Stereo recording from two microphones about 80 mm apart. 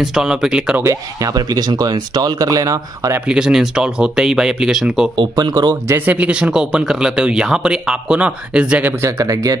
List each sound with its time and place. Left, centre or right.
0.0 s speech: centre
1.2 s speech: right
3.3 s speech: centre
5.1 s speech: right
5.9 s speech: right
6.1 s speech: centre
9.0 s speech: right